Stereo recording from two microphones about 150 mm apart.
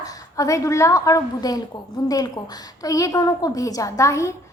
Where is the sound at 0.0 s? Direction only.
25° left (ahead or behind).